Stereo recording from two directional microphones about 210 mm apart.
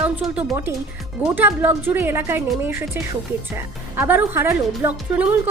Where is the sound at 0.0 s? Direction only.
5° right (ahead or behind).